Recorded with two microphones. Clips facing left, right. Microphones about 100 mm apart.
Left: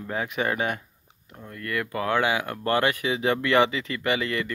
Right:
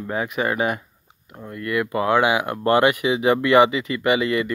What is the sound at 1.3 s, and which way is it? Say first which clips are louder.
Speech: right 6 dB; 15° right (ahead or behind).